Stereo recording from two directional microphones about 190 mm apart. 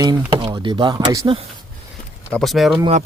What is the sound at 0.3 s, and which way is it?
Speech, 25° right (ahead or behind).